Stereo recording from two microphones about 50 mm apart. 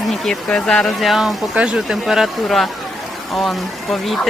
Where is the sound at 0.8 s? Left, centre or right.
Centre.